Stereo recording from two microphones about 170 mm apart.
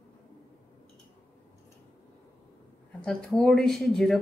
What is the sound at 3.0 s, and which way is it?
Speech, centre (ahead or behind).